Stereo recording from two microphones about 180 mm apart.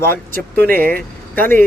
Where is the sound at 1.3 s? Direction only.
10° left (ahead or behind).